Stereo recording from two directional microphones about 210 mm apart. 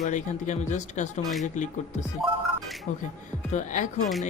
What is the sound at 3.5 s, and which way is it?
Speech, 35° left (ahead or behind).